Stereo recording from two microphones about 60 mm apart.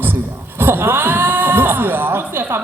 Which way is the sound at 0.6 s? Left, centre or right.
Right.